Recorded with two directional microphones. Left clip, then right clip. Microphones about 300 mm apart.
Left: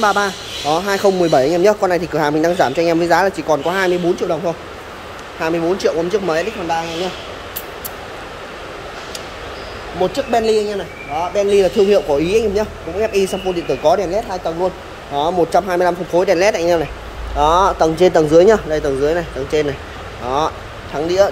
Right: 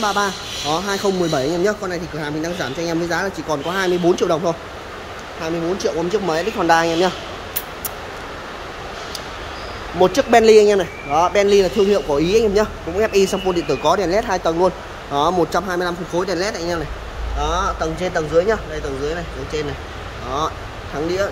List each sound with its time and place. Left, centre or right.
0.0 s speech: centre
9.9 s speech: centre
21.2 s speech: centre